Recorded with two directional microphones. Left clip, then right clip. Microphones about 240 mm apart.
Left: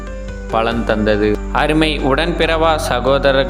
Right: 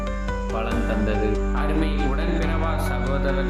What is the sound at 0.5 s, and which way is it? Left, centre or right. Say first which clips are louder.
Speech: left 12 dB; left.